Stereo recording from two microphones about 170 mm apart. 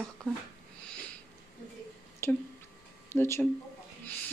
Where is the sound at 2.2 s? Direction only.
15° left (ahead or behind).